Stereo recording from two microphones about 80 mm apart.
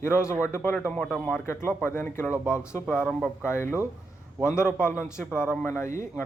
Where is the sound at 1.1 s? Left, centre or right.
Centre.